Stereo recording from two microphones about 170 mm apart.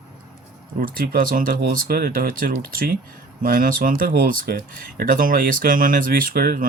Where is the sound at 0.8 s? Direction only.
55° right (ahead or behind).